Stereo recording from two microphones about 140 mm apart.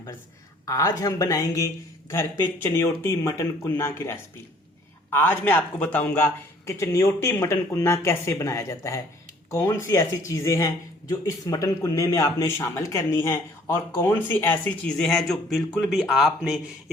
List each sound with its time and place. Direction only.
0.6 s speech: 25° left (ahead or behind); by 16.5 s centre (ahead or behind)